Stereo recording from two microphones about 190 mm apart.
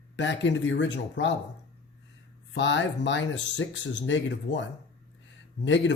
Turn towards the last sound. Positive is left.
turn(degrees=70)  # may be behind; listen again after turning